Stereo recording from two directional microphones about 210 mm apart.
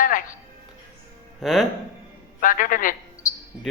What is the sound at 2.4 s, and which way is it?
Speech, 40° left (ahead or behind).